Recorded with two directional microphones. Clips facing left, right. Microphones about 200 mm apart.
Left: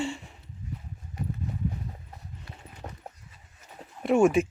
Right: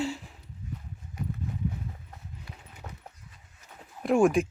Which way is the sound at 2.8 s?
30° left (ahead or behind).